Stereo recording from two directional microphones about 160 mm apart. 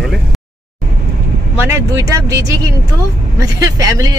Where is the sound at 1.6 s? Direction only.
15° right (ahead or behind).